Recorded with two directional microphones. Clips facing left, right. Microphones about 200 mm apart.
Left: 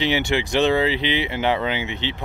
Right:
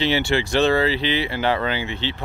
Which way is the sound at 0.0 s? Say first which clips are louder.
Right 1 dB; 15° left (ahead or behind).